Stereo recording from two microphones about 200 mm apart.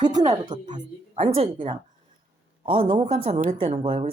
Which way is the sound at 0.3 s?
20° right (ahead or behind).